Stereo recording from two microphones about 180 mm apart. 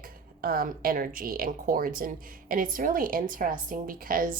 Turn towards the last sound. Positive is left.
turn(degrees=-50)  # may be behind; listen again after turning